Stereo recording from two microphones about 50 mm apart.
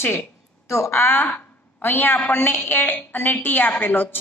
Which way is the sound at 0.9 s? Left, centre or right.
Left.